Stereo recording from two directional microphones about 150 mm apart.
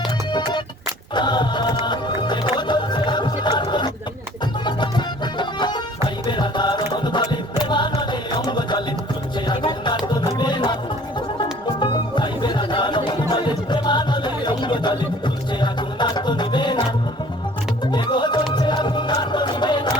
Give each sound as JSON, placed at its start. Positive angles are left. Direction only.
{"t": 0.3, "sound": "music", "side_deg": 30}
{"t": 1.1, "sound": "choir", "side_deg": 30}
{"t": 1.8, "sound": "music", "side_deg": 30}
{"t": 11.8, "sound": "music", "side_deg": 30}
{"t": 17.9, "sound": "music", "side_deg": 30}